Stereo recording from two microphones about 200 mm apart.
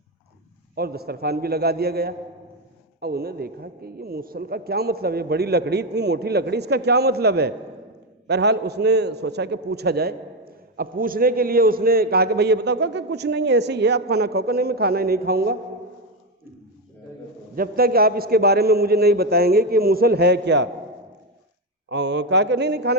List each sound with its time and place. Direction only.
0.8 s a man's voice: 50° right (ahead or behind)
17.5 s a man's voice: 50° right (ahead or behind)
21.8 s speech: 60° right (ahead or behind)